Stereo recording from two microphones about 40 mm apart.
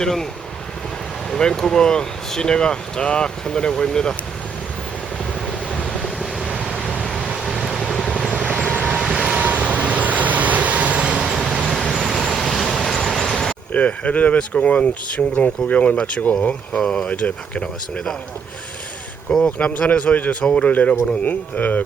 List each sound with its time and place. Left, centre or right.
0.0 s speech: centre
1.4 s speech: centre
5.5 s waves: left
7.7 s vehicle: centre
8.3 s vehicle: right
11.2 s vehicle: centre
13.7 s speech: left
16.7 s speech: centre
17.1 s speech: left
19.3 s speech: left
20.7 s speech: left